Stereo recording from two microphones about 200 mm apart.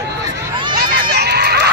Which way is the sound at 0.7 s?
50° right (ahead or behind).